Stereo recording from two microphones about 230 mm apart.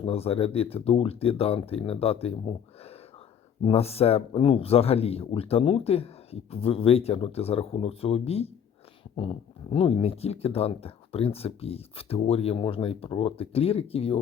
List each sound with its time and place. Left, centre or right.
0.0 s speech: left
3.6 s speech: left